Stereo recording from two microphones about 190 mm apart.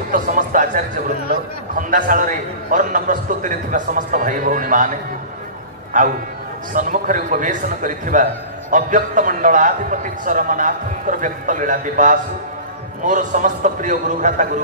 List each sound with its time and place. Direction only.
0.1 s a sound: 45° right (ahead or behind)
1.8 s a man's voice: 45° right (ahead or behind)
5.9 s a man's voice: 45° right (ahead or behind)